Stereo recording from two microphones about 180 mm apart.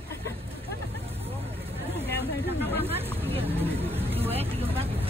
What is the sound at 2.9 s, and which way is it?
Hubbub, 10° right (ahead or behind).